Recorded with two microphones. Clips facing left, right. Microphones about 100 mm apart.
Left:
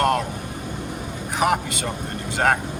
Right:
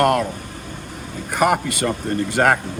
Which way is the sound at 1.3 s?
55° right (ahead or behind).